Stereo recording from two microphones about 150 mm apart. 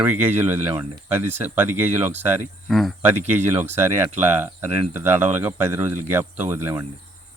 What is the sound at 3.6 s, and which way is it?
Speech, 15° right (ahead or behind).